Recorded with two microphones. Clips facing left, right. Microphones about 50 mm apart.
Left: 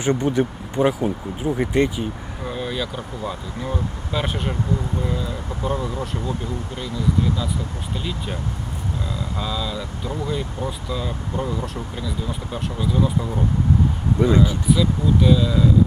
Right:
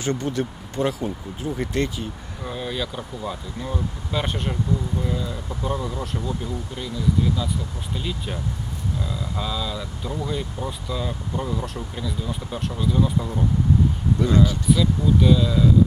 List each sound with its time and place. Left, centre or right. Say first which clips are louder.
0.0 s speech: left 5 dB; centre
2.4 s speech: left 2 dB; centre
7.9 s speech: left 1 dB; centre
14.3 s speech: left 1 dB; centre
14.7 s speech: left 1 dB; centre